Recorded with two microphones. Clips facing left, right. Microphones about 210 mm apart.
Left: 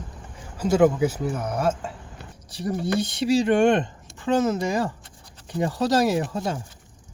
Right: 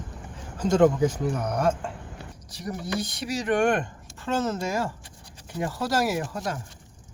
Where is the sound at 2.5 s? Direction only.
30° left (ahead or behind).